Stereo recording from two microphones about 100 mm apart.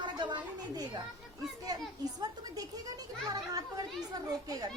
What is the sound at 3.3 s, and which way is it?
A child's voice, 40° right (ahead or behind).